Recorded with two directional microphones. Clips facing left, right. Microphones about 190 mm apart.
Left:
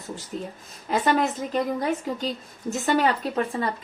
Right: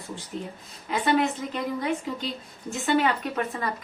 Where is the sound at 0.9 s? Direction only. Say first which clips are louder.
Left 1 dB; 40° left (ahead or behind).